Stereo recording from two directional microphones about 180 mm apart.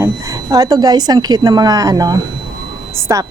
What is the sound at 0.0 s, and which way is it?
A woman's voice, 20° right (ahead or behind).